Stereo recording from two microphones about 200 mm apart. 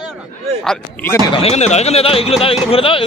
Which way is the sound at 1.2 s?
25° left (ahead or behind).